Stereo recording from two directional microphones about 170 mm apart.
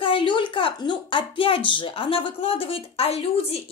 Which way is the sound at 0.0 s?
30° left (ahead or behind).